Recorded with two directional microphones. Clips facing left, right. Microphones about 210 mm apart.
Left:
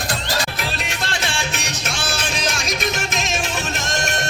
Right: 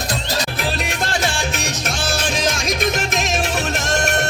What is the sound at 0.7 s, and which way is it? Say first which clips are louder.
Music: right 4 dB; 50° right (ahead or behind).